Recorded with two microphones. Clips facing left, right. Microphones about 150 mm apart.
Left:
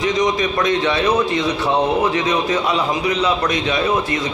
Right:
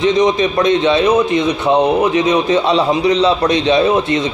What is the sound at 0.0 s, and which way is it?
A man's voice, 25° right (ahead or behind).